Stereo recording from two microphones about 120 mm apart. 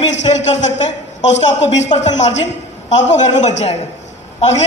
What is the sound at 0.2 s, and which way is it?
A woman's voice, 75° left (ahead or behind).